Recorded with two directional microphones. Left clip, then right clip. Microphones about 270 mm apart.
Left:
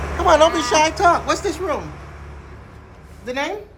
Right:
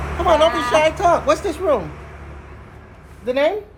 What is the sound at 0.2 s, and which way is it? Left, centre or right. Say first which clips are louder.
Speech: left 1 dB; centre.